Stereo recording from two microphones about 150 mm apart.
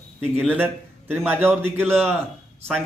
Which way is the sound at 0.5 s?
15° right (ahead or behind).